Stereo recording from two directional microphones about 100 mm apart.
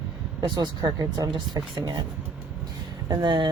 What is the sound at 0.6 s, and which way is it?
Speech, 45° right (ahead or behind).